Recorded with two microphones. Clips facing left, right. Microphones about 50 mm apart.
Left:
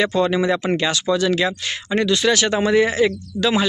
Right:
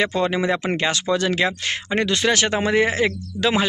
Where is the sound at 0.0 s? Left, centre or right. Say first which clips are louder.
Left 2 dB; right.